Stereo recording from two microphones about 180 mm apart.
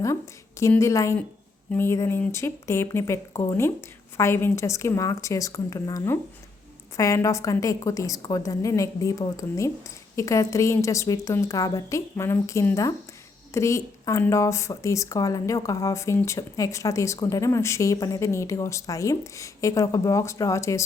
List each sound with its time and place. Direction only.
0.6 s speech: 15° left (ahead or behind)